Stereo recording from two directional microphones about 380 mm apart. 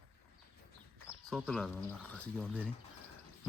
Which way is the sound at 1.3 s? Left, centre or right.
Centre.